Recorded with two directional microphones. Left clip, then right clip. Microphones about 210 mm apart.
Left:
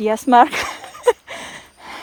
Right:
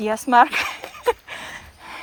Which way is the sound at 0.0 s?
30° left (ahead or behind).